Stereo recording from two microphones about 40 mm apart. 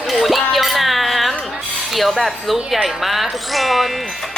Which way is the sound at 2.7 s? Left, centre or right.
Centre.